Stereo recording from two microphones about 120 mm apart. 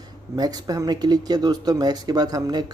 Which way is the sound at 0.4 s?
30° right (ahead or behind).